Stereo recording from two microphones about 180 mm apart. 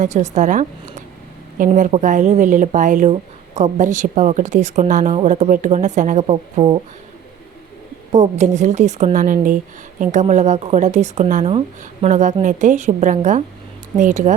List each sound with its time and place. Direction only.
0.0 s speech: 40° right (ahead or behind)
8.1 s speech: 40° right (ahead or behind)